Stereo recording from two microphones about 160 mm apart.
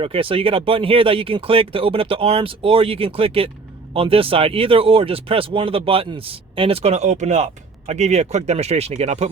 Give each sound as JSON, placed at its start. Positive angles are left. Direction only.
{"t": 0.0, "sound": "speech", "side_deg": -35}